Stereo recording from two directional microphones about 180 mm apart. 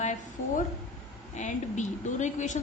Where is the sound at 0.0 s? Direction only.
40° left (ahead or behind).